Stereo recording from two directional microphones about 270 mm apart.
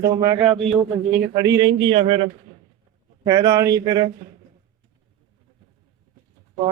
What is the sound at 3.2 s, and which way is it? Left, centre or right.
Speech, centre.